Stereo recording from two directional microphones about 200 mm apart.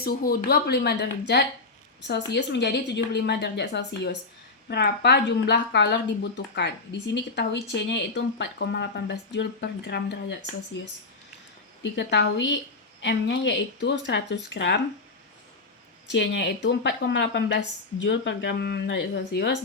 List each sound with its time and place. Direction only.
0.0 s speech: 50° left (ahead or behind)
16.1 s speech: 65° left (ahead or behind)